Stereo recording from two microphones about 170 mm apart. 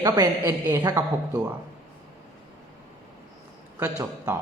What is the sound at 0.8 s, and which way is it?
Speech, 20° right (ahead or behind).